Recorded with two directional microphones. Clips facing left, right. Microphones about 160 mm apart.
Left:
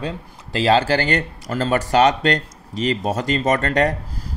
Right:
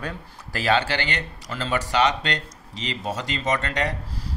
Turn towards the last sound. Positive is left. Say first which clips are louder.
# left 7 dB
turn(degrees=50)  # may be behind; listen again after turning